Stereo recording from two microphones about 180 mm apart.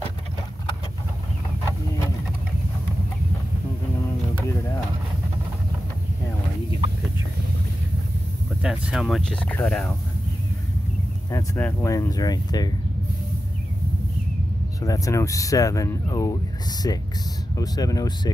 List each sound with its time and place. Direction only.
8.6 s speech: 5° right (ahead or behind)
11.2 s speech: 15° left (ahead or behind)
14.8 s speech: 20° left (ahead or behind)